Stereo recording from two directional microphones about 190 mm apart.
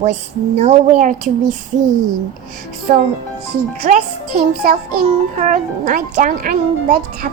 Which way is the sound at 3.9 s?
35° right (ahead or behind).